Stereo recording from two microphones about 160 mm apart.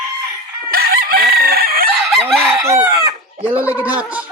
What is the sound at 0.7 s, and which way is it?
Chicken, 65° right (ahead or behind).